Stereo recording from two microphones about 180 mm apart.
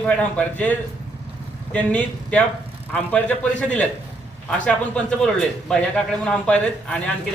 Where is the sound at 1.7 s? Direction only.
10° left (ahead or behind).